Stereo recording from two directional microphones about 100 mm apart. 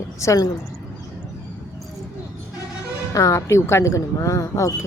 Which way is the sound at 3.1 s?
30° left (ahead or behind).